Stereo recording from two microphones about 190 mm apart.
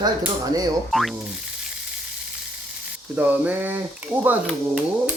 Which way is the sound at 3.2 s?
10° right (ahead or behind).